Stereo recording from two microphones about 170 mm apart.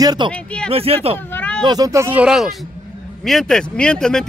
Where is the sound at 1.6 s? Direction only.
20° right (ahead or behind).